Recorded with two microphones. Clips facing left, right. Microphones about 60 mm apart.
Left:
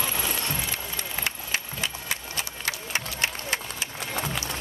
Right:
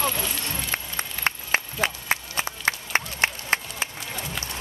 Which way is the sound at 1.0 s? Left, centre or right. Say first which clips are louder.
Right 4 dB; right.